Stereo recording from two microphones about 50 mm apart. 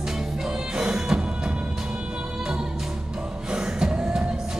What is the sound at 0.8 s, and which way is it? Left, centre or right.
Music, centre.